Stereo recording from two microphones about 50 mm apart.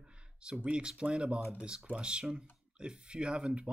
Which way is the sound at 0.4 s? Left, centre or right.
Right.